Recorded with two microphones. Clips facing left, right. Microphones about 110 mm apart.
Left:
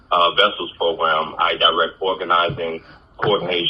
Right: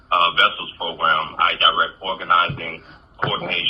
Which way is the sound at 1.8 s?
30° left (ahead or behind).